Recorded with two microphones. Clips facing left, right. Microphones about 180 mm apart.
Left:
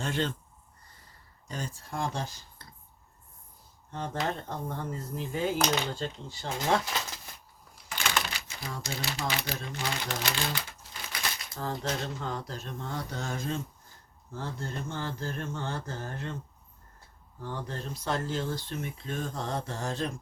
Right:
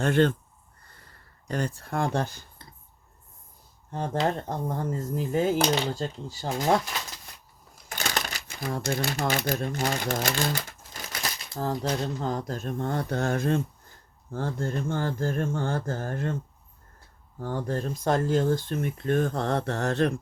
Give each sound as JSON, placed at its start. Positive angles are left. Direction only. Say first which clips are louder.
{"t": 0.0, "sound": "speech", "louder": "right 9 dB", "side_deg": -60}
{"t": 0.9, "sound": "a sound", "louder": "right 5 dB", "side_deg": -60}
{"t": 4.4, "sound": "speech", "louder": "right 5 dB", "side_deg": -45}
{"t": 7.9, "sound": "crushing", "louder": "right 1 dB", "side_deg": -40}
{"t": 8.4, "sound": "speech", "louder": "right 9 dB", "side_deg": -55}
{"t": 17.4, "sound": "speech", "louder": "right 8 dB", "side_deg": -45}